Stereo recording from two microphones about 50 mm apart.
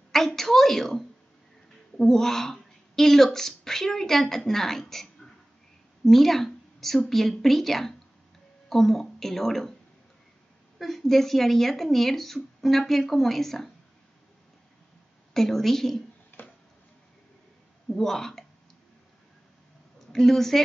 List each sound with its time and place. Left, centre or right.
0.1 s a woman's voice: centre
10.8 s a woman's voice: centre
15.3 s a woman's voice: centre
16.3 s music: left
17.8 s a woman's voice: centre
20.1 s a woman's voice: centre